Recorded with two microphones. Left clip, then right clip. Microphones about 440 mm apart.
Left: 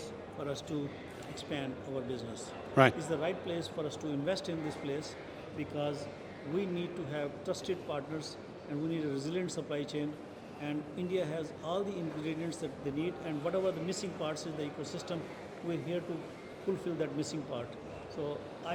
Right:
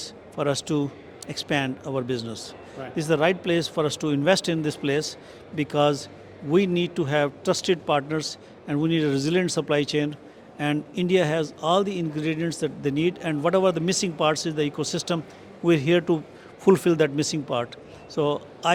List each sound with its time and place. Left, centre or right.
0.3 s a man's voice: right
16.8 s a man's voice: right
18.1 s a man's voice: right